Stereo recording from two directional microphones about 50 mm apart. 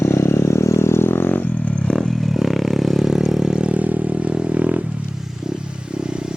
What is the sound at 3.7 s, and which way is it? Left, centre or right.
Vehicle, right.